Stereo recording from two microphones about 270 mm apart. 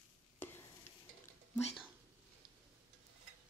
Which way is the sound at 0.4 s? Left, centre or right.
Centre.